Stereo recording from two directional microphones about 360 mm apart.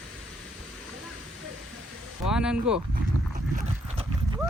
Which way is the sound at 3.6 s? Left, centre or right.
Centre.